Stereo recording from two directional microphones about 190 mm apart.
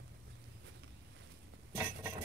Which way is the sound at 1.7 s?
15° right (ahead or behind).